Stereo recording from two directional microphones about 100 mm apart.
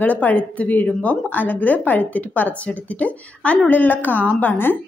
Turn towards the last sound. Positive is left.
turn(degrees=20)  # may be behind; listen again after turning